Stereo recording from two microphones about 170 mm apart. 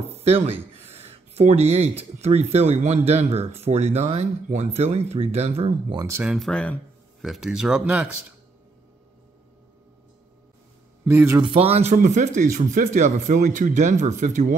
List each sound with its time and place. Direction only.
0.1 s speech: 35° right (ahead or behind)
5.9 s speech: 15° right (ahead or behind)
6.2 s speech: centre (ahead or behind)
11.1 s speech: 15° right (ahead or behind)
11.4 s speech: 35° right (ahead or behind)